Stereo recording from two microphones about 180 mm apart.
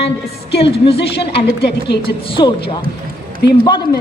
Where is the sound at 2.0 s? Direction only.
30° left (ahead or behind).